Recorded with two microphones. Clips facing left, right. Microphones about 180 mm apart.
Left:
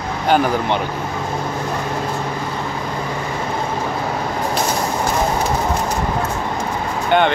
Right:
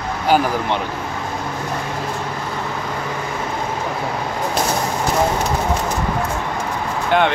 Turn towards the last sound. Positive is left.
turn(degrees=0)  # may be behind; listen again after turning